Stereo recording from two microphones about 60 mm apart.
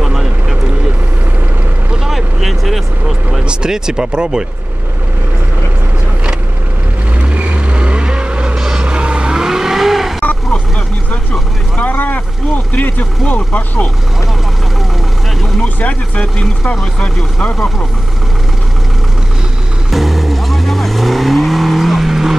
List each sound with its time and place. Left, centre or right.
0.0 s a sound: centre
2.0 s vehicle: centre
3.4 s speech: centre
7.2 s vehicle: right; by 10.1 s centre
11.8 s speech: left
15.6 s speech: left
19.9 s vehicle: centre